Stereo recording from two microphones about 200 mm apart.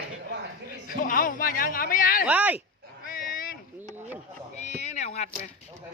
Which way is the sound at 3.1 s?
45° left (ahead or behind).